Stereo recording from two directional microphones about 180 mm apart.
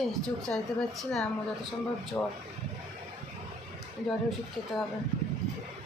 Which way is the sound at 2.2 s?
15° left (ahead or behind).